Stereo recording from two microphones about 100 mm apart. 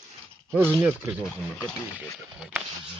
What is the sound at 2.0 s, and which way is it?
Speech, 15° right (ahead or behind).